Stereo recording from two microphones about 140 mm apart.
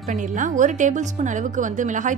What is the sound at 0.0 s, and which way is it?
A woman's voice, 65° right (ahead or behind).